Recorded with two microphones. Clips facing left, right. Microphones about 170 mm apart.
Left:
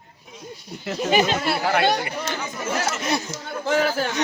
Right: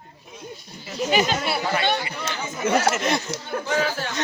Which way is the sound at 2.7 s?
70° right (ahead or behind).